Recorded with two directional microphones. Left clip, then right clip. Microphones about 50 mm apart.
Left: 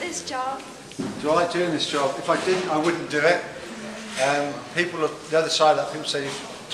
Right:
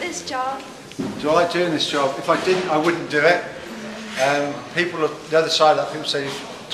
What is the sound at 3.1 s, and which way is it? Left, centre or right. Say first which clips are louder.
A man's voice: right 4 dB; centre.